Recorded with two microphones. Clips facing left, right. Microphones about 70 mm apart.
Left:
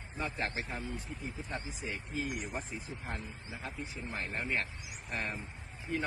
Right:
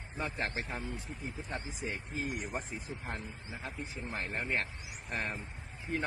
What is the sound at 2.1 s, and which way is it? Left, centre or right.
Speech, right.